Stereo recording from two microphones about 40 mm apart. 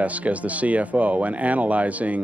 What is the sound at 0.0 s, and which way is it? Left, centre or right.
Speech, right.